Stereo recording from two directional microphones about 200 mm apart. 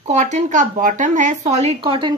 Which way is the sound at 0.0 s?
35° right (ahead or behind).